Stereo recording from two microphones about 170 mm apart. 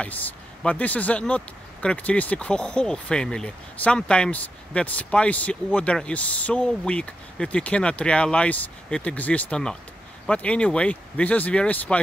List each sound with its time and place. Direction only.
0.0 s speech: 10° left (ahead or behind)